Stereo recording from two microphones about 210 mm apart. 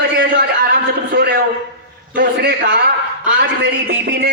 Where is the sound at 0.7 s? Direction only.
50° right (ahead or behind).